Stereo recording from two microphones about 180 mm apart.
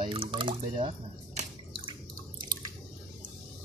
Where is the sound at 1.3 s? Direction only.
30° right (ahead or behind).